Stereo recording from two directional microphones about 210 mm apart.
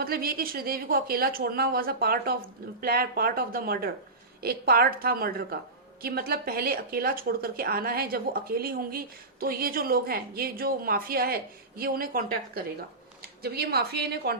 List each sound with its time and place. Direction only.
0.0 s speech: 45° right (ahead or behind)